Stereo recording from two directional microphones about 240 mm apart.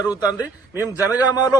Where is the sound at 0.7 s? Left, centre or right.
Centre.